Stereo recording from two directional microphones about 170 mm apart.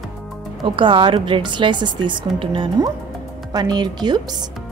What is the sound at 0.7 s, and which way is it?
Speech, 30° right (ahead or behind).